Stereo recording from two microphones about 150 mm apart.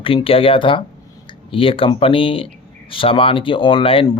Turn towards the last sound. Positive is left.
turn(degrees=40)  # may be behind; listen again after turning